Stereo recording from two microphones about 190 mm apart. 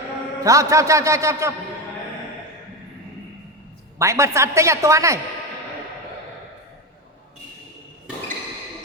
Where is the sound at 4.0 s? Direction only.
15° right (ahead or behind).